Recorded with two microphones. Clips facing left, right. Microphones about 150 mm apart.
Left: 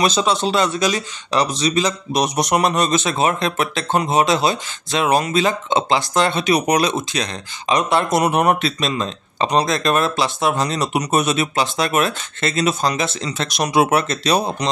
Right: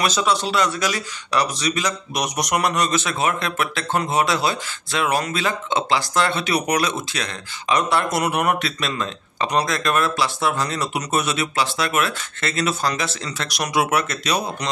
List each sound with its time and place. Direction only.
0.0 s speech: 25° left (ahead or behind)